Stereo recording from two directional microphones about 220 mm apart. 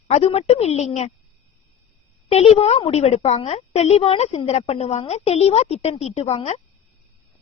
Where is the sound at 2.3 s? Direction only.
30° left (ahead or behind).